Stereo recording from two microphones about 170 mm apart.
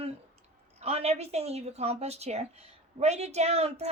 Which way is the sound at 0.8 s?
40° right (ahead or behind).